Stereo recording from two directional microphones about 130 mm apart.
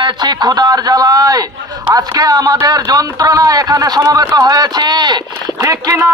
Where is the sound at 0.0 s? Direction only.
35° right (ahead or behind).